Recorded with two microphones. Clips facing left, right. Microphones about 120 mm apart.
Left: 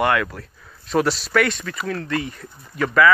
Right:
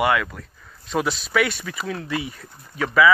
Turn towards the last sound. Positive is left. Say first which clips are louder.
# left 1 dB
turn(degrees=-5)  # may be behind; listen again after turning